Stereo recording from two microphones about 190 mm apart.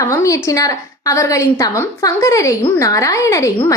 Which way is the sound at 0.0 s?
15° left (ahead or behind).